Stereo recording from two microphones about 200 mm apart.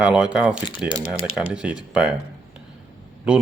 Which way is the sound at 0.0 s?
5° right (ahead or behind).